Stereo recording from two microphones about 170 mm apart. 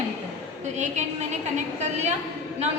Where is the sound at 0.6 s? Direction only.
45° right (ahead or behind).